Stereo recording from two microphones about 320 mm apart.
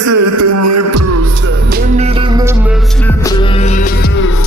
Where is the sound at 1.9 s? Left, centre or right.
Centre.